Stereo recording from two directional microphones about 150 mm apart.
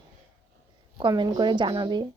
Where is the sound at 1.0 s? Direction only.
30° right (ahead or behind).